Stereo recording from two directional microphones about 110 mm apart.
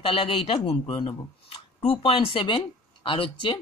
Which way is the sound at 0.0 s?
55° left (ahead or behind).